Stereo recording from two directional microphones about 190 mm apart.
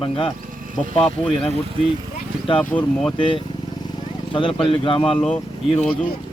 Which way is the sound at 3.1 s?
25° left (ahead or behind).